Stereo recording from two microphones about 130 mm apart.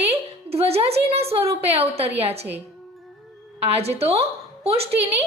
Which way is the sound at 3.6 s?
50° right (ahead or behind).